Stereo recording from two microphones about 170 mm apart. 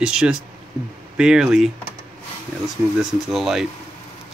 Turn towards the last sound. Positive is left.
turn(degrees=0)  # may be behind; listen again after turning